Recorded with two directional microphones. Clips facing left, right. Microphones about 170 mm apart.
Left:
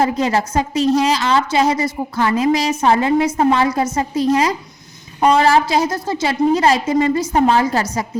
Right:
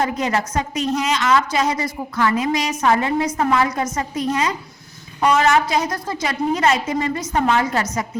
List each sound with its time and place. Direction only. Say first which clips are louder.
0.0 s a woman's voice: left 4 dB; 30° left (ahead or behind)